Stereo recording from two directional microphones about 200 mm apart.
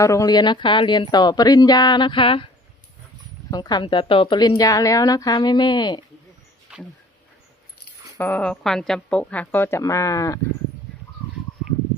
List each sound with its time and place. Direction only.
0.0 s a woman's voice: 15° left (ahead or behind)
3.5 s a woman's voice: 20° left (ahead or behind)
8.2 s speech: 5° left (ahead or behind)